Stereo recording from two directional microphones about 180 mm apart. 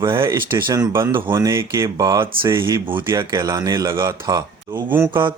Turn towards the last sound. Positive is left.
turn(degrees=-25)  # may be behind; listen again after turning